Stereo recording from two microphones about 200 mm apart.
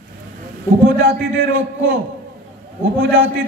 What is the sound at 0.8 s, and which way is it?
A man's voice, 65° right (ahead or behind).